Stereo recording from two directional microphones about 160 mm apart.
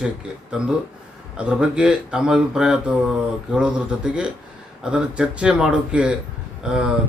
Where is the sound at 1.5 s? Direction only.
5° right (ahead or behind).